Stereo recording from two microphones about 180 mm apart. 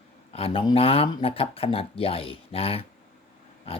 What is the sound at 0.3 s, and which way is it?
Speech, 30° left (ahead or behind).